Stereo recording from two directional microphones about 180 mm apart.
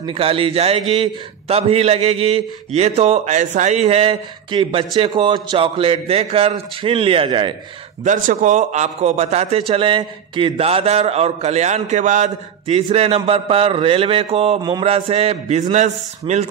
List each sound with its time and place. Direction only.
0.0 s a man's voice: 30° right (ahead or behind)
8.0 s a man's voice: 45° right (ahead or behind)